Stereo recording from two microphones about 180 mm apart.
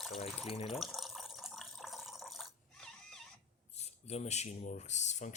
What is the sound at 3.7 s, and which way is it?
Speech, 35° left (ahead or behind).